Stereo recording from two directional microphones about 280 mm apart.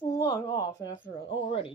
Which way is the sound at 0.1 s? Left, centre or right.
Centre.